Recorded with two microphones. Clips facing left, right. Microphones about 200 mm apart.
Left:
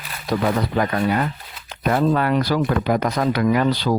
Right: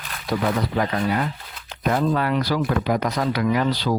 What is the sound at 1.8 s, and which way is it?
Speech, 55° left (ahead or behind).